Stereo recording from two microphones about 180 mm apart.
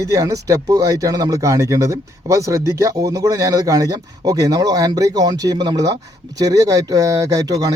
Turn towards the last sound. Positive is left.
turn(degrees=-20)  # may be behind; listen again after turning